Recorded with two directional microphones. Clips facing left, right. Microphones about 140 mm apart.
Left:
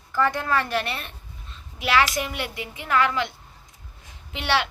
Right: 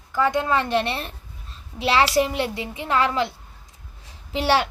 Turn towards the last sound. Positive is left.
turn(degrees=-35)  # may be behind; listen again after turning